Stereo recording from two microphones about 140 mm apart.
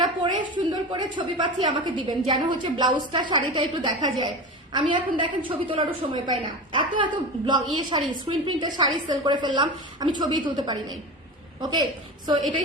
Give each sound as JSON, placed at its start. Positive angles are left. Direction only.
{"t": 0.3, "sound": "a woman's voice", "side_deg": -30}